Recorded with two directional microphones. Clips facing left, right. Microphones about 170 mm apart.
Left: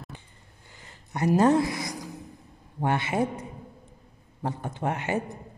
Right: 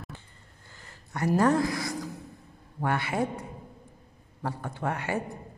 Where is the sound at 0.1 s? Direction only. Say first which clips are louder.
Left 1 dB; 15° left (ahead or behind).